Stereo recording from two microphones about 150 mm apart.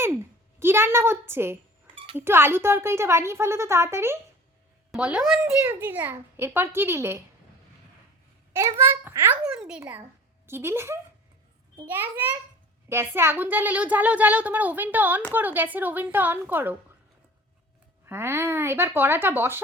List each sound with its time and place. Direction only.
0.0 s a woman's voice: 15° right (ahead or behind)
8.8 s a child's voice: 15° right (ahead or behind)
18.0 s a child's voice: 15° right (ahead or behind)